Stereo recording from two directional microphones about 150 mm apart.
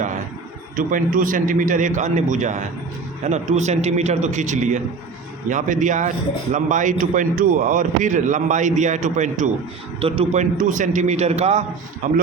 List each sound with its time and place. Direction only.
0.8 s a man's voice: 65° right (ahead or behind)
10.0 s a man's voice: 40° right (ahead or behind)
10.6 s a man's voice: 55° right (ahead or behind)